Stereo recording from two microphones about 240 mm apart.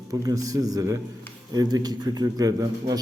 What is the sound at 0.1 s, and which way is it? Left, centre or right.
A man's voice, centre.